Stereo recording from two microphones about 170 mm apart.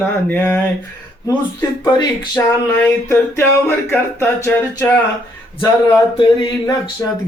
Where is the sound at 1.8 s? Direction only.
20° left (ahead or behind).